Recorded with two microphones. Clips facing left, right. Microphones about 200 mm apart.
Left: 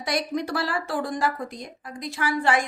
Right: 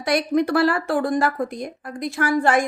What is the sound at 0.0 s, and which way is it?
A woman's voice, 60° right (ahead or behind).